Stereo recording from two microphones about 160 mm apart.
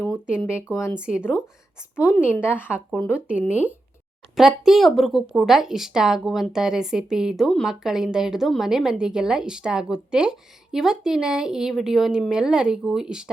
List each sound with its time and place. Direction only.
0.5 s a woman's voice: 15° left (ahead or behind)
0.9 s speech: 5° right (ahead or behind)
2.1 s a woman's voice: 10° left (ahead or behind)
3.1 s speech: 5° right (ahead or behind)
3.4 s a woman's voice: 10° left (ahead or behind)
4.4 s speech: centre (ahead or behind)